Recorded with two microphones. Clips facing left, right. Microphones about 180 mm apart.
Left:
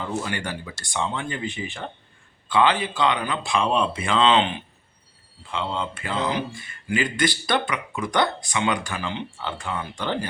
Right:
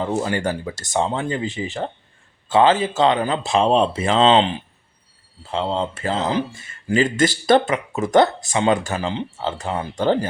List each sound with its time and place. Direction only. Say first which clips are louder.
0.0 s speech: right 7 dB; 35° right (ahead or behind)